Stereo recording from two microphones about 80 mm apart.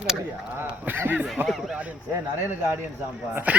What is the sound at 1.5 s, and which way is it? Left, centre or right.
Speech, centre.